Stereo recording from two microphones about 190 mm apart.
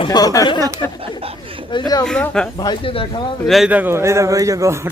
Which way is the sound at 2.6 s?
25° left (ahead or behind).